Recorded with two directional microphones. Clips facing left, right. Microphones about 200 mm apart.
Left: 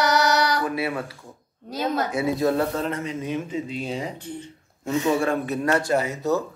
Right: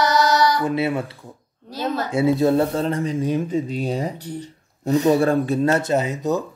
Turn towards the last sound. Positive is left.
turn(degrees=-15)  # may be behind; listen again after turning